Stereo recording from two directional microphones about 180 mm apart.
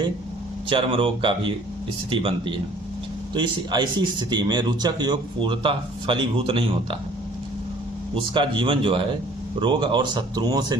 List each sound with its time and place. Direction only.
0.7 s speech: 30° right (ahead or behind)
3.3 s speech: 25° right (ahead or behind)
8.1 s speech: 30° right (ahead or behind)